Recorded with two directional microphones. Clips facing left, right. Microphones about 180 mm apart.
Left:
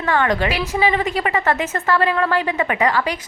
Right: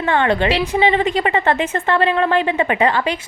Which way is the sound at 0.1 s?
25° right (ahead or behind).